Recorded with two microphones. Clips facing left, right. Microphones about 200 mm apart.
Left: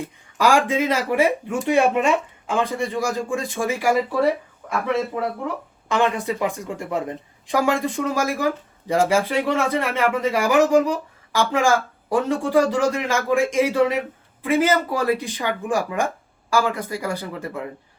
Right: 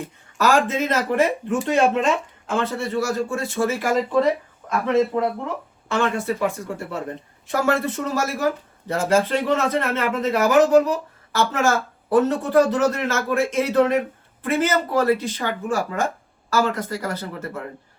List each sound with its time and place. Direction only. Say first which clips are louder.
0.3 s speech: left 1 dB; 10° left (ahead or behind)
5.9 s speech: left 1 dB; 15° left (ahead or behind)